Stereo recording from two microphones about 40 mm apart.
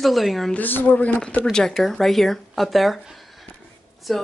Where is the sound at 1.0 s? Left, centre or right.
Left.